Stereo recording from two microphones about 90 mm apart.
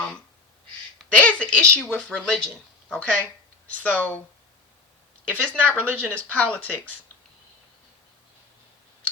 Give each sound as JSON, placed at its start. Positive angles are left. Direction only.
{"t": 1.2, "sound": "speech", "side_deg": 15}
{"t": 5.4, "sound": "speech", "side_deg": 15}
{"t": 5.7, "sound": "speech", "side_deg": -20}
{"t": 6.1, "sound": "speech", "side_deg": 15}